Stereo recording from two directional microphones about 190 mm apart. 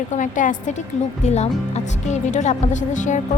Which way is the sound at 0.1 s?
40° left (ahead or behind).